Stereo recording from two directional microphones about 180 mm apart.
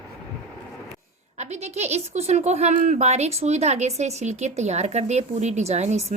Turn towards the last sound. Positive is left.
turn(degrees=-40)  # may be behind; listen again after turning